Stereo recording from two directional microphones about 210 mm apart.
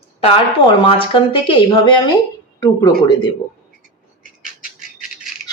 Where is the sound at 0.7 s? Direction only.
25° left (ahead or behind).